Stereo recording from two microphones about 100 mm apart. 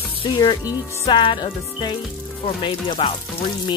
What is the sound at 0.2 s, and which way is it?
Music, 45° left (ahead or behind).